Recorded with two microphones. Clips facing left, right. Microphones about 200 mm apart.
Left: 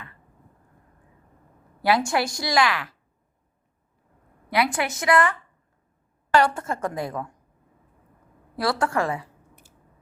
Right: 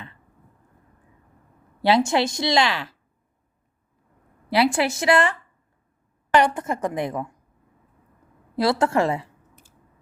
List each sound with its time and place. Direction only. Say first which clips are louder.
1.8 s a woman's voice: right 3 dB; 25° right (ahead or behind)
4.4 s a woman's voice: right 4 dB; 30° right (ahead or behind)
8.5 s a woman's voice: right 4 dB; 25° right (ahead or behind)